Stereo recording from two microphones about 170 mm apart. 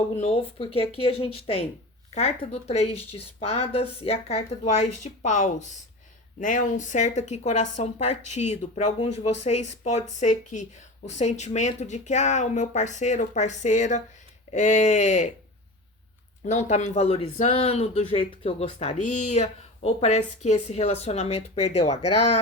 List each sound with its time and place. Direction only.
0.2 s speech: 35° left (ahead or behind)
16.4 s speech: 45° left (ahead or behind)